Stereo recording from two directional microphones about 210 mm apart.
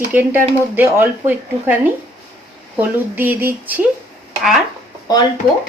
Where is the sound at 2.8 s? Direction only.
10° right (ahead or behind).